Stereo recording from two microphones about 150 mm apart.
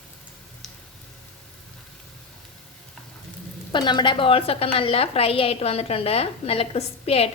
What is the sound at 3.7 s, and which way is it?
A woman's voice, 30° left (ahead or behind).